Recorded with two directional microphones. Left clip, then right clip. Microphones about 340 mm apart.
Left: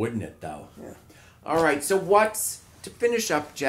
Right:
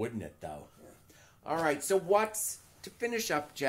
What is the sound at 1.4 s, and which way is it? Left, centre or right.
Speech, right.